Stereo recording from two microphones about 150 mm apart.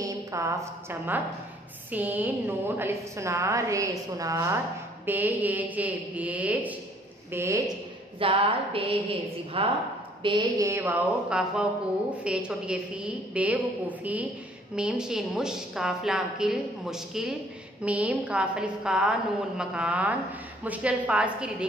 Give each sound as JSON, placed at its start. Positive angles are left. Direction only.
{"t": 0.0, "sound": "a woman's voice", "side_deg": -20}
{"t": 8.2, "sound": "a woman's voice", "side_deg": -35}
{"t": 10.2, "sound": "a woman's voice", "side_deg": -25}